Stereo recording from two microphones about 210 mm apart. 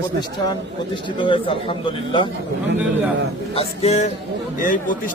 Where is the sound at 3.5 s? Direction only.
30° left (ahead or behind).